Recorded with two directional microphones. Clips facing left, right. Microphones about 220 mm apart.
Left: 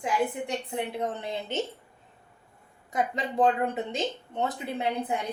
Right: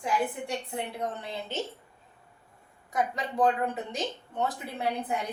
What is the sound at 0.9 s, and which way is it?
Speech, 20° left (ahead or behind).